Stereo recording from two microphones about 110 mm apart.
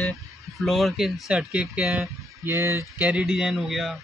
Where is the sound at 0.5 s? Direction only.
Centre (ahead or behind).